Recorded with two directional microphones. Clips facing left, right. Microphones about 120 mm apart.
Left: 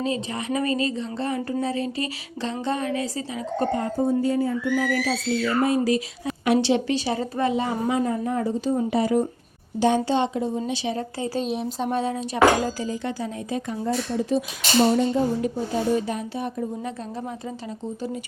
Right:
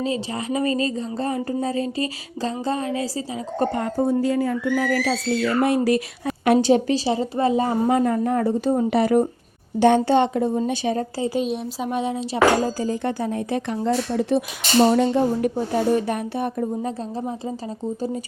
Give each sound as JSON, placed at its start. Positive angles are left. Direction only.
{"t": 0.0, "sound": "a woman's voice", "side_deg": -30}
{"t": 3.7, "sound": "speech", "side_deg": -65}
{"t": 11.3, "sound": "speech", "side_deg": 0}
{"t": 11.9, "sound": "dishes", "side_deg": -20}
{"t": 12.8, "sound": "speech", "side_deg": -55}
{"t": 16.8, "sound": "a woman's voice", "side_deg": -30}